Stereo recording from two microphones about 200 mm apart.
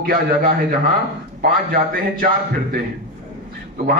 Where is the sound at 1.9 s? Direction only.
45° right (ahead or behind).